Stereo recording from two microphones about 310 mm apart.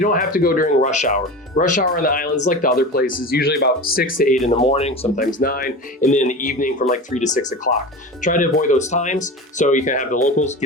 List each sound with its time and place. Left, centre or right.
0.0 s speech: left